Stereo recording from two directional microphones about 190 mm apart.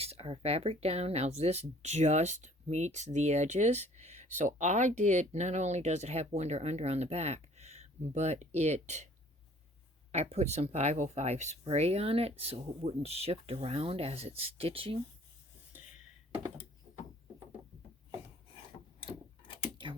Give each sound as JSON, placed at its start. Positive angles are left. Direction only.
{"t": 0.0, "sound": "speech", "side_deg": -30}
{"t": 10.1, "sound": "speech", "side_deg": -35}
{"t": 18.9, "sound": "a sound", "side_deg": 30}